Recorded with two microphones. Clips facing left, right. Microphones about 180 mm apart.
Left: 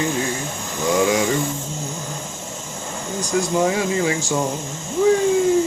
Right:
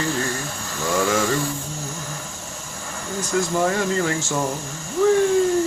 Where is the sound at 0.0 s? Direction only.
20° left (ahead or behind).